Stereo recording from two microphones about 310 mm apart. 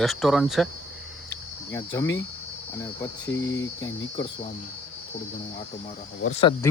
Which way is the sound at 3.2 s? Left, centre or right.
Left.